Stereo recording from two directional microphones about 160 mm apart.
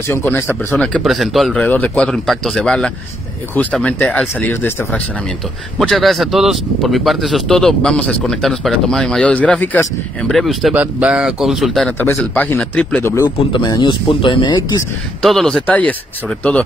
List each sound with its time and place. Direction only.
0.0 s speech: 15° left (ahead or behind)
5.8 s speech: centre (ahead or behind)
12.1 s speech: 15° left (ahead or behind)
13.5 s speech: 30° left (ahead or behind)
15.2 s speech: 5° left (ahead or behind)